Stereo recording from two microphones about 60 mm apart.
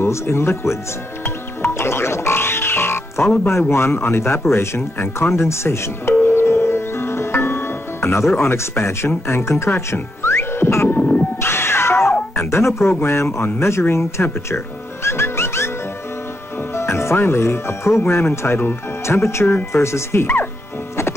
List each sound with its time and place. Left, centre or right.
0.0 s speech: left
1.2 s music: left
3.7 s speech: left
6.2 s music: left
8.4 s speech: left
10.2 s music: left
10.9 s music: left
11.4 s cat: left
12.4 s speech: left
15.0 s music: left
16.7 s speech: left